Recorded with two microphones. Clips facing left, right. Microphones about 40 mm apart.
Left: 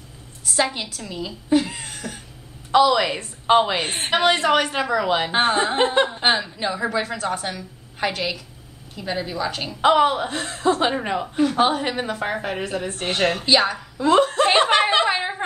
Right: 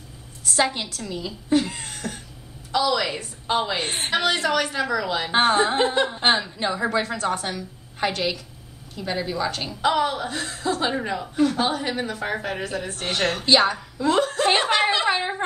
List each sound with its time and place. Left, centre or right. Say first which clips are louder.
0.5 s a woman's voice: even; centre
2.7 s a woman's voice: left 6 dB; left
3.7 s a woman's voice: left 2 dB; centre
4.1 s a woman's voice: left 5 dB; left
5.3 s a woman's voice: right 1 dB; centre
9.8 s a woman's voice: left 6 dB; left
13.0 s a woman's voice: left 3 dB; centre
13.4 s a woman's voice: right 4 dB; centre
14.0 s a woman's voice: left 4 dB; left
15.0 s a woman's voice: even; centre